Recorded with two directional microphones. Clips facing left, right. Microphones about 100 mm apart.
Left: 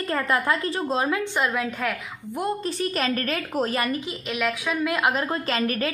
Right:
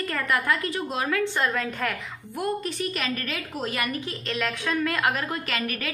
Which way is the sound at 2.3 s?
30° left (ahead or behind).